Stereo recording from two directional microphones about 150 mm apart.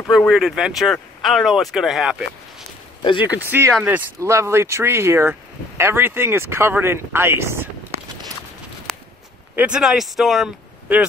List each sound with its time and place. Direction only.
0.0 s speech: centre (ahead or behind)
3.0 s speech: 35° left (ahead or behind)
3.4 s speech: 15° right (ahead or behind)
8.9 s walk: 5° left (ahead or behind)
9.6 s speech: 5° right (ahead or behind)